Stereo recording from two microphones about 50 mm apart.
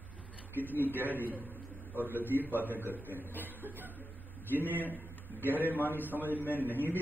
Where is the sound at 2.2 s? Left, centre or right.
Left.